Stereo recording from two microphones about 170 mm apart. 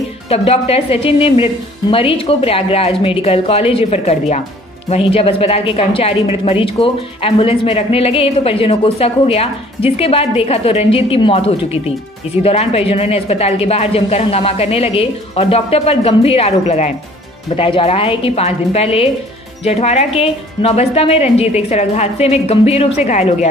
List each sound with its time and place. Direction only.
0.3 s a woman's voice: 35° left (ahead or behind)